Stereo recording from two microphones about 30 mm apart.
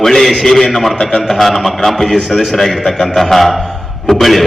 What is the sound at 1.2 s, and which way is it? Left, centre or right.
A man's voice, centre.